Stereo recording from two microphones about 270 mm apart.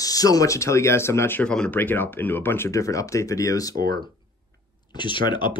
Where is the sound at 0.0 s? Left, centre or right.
Centre.